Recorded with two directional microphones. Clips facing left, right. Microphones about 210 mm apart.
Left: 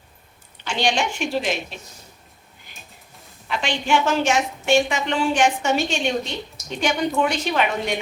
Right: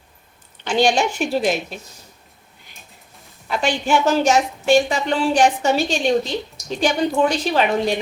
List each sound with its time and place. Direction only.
0.7 s a woman's voice: 40° right (ahead or behind)
3.5 s a woman's voice: 40° right (ahead or behind)